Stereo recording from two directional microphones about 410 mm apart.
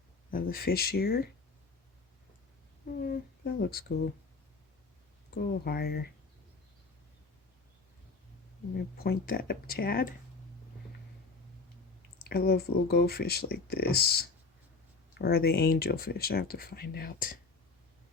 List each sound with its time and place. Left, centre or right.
0.3 s speech: left
3.1 s speech: left
5.3 s speech: left
8.7 s speech: left
12.3 s speech: left